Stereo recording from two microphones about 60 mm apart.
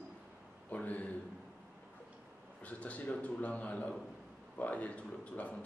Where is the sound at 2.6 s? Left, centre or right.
Left.